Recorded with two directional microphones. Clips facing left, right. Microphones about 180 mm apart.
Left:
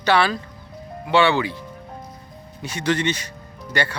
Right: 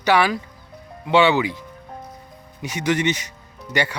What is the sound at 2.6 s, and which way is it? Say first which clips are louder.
Speech: right 1 dB; 15° right (ahead or behind).